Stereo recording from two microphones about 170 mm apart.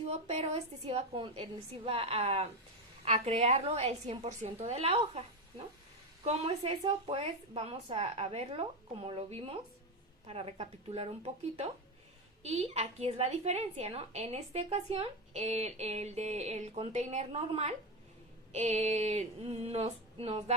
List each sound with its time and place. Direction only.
0.1 s a woman's voice: 40° right (ahead or behind)